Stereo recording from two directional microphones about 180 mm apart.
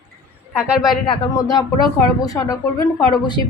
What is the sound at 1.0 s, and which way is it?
Speech, 25° left (ahead or behind).